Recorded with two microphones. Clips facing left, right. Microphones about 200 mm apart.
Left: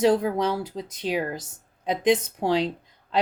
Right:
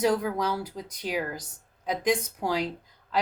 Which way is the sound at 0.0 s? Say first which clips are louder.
Left 4 dB; 30° left (ahead or behind).